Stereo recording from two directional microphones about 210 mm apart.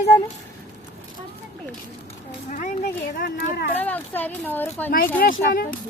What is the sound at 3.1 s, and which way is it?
Speech, 45° left (ahead or behind).